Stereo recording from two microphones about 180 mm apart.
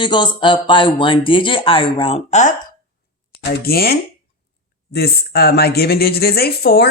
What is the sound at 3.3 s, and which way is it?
A woman's voice, 60° left (ahead or behind).